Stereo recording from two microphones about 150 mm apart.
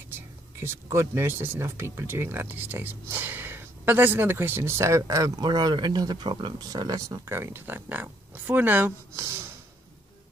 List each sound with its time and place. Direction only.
0.1 s speech: 15° right (ahead or behind)